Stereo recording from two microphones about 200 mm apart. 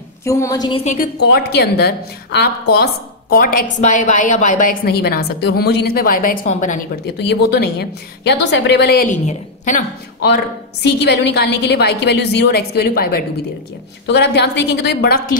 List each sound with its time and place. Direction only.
0.2 s a woman's voice: 15° left (ahead or behind)
0.8 s a woman's voice: 50° left (ahead or behind)
7.2 s a woman's voice: 55° left (ahead or behind); by 9.8 s 35° left (ahead or behind)
10.3 s a woman's voice: 55° left (ahead or behind)